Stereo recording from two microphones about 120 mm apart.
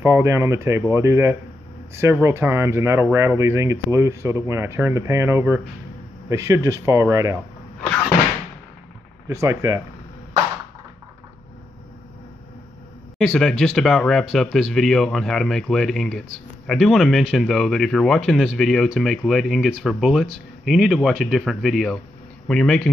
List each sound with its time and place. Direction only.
0.0 s speech: 25° right (ahead or behind)
9.3 s speech: 25° right (ahead or behind)
13.2 s speech: centre (ahead or behind)